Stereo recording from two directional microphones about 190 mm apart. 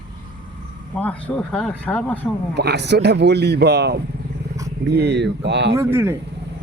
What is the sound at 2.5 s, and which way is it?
Speech, 60° right (ahead or behind).